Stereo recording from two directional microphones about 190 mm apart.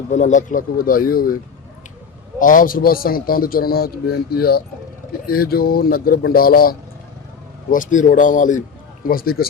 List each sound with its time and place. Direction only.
0.1 s a man's voice: 40° left (ahead or behind)
2.4 s a man's voice: 45° left (ahead or behind)